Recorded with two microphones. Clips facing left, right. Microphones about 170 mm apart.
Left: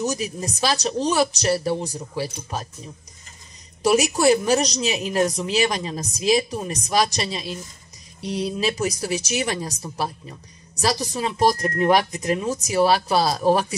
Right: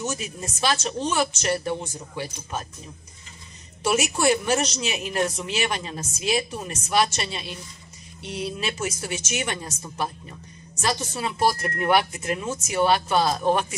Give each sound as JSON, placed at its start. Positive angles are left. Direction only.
{"t": 0.0, "sound": "speech", "side_deg": 35}
{"t": 3.8, "sound": "speech", "side_deg": 35}
{"t": 10.8, "sound": "speech", "side_deg": 35}